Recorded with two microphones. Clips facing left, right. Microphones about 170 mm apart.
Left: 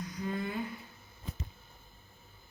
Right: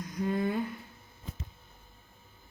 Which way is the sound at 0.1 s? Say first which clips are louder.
Right 8 dB; 45° right (ahead or behind).